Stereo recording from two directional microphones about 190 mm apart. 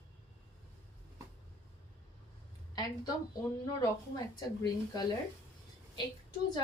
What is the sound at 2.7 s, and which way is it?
A woman's voice, 20° left (ahead or behind).